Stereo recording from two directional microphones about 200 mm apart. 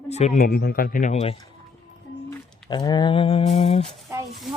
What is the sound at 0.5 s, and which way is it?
Speech, 50° left (ahead or behind).